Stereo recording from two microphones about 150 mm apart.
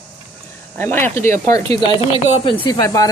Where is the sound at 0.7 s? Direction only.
15° left (ahead or behind).